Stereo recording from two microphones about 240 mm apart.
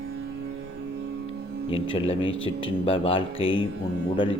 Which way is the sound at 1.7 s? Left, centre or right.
Left.